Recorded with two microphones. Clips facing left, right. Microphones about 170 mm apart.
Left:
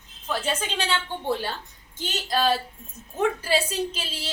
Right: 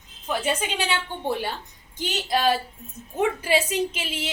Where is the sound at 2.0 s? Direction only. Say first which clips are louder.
Right 1 dB; 15° right (ahead or behind).